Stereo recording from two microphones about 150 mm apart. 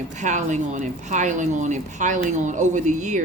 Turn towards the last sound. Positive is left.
turn(degrees=-55)  # may be behind; listen again after turning